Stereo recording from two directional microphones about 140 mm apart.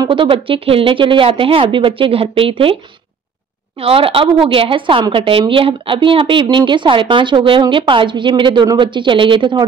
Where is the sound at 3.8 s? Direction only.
40° right (ahead or behind).